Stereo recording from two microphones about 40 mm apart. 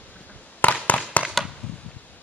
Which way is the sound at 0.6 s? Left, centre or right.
Left.